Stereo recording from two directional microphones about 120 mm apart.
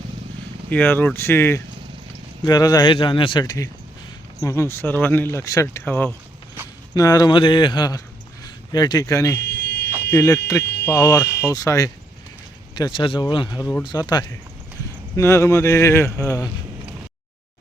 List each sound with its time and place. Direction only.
0.7 s speech: 15° left (ahead or behind)
2.4 s speech: 35° left (ahead or behind); by 6.1 s 15° left (ahead or behind)
6.9 s speech: 30° left (ahead or behind)
7.3 s speech: 45° left (ahead or behind)
12.7 s speech: 40° left (ahead or behind)